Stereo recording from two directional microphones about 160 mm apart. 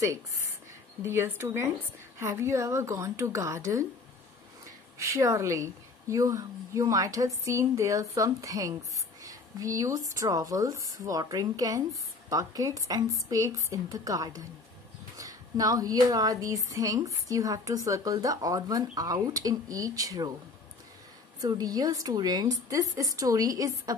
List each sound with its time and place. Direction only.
1.0 s speech: 15° right (ahead or behind)
4.9 s speech: 20° right (ahead or behind)
21.4 s speech: 25° right (ahead or behind)